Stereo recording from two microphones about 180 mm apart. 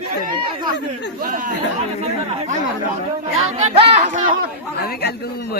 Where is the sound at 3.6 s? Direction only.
35° right (ahead or behind).